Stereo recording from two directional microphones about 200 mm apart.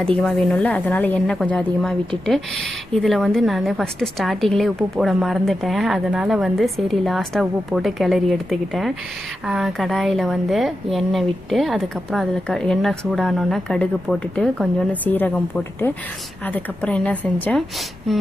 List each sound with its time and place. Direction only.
0.0 s a woman's voice: 5° left (ahead or behind)